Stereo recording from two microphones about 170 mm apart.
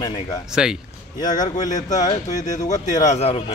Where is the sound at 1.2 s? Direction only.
25° left (ahead or behind).